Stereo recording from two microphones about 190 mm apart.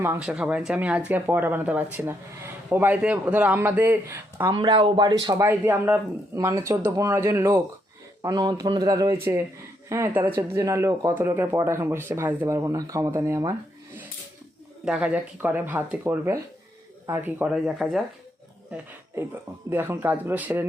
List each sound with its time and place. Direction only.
0.0 s speech: 10° right (ahead or behind)
4.5 s speech: 25° right (ahead or behind)
14.8 s speech: 5° right (ahead or behind)